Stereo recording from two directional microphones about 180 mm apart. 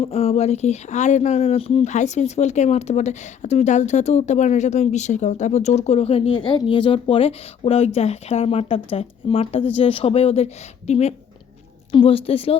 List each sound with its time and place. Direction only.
0.0 s speech: 35° left (ahead or behind)